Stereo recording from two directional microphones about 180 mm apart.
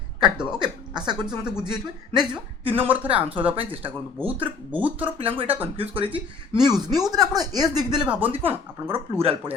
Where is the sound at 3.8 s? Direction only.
10° right (ahead or behind).